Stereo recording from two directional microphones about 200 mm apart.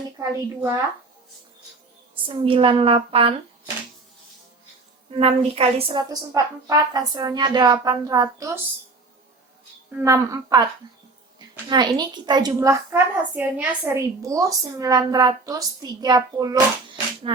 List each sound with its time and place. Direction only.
0.2 s a woman's voice: 10° right (ahead or behind)
2.2 s a woman's voice: 25° right (ahead or behind)
5.1 s a woman's voice: 30° right (ahead or behind); by 8.6 s 15° right (ahead or behind)
10.0 s a woman's voice: 15° right (ahead or behind)
11.7 s a woman's voice: 20° right (ahead or behind)